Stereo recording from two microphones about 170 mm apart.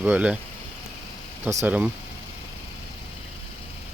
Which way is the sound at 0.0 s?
5° right (ahead or behind).